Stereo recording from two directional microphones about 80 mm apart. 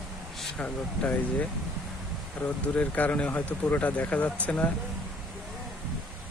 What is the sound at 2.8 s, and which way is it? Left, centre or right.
Speech, centre.